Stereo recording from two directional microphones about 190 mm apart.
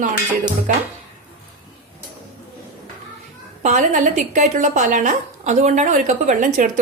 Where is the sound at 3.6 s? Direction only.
40° right (ahead or behind).